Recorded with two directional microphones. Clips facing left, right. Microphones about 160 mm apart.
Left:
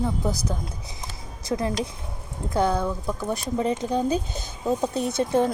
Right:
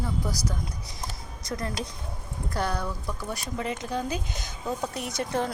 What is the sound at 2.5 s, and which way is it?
Speech, 20° left (ahead or behind).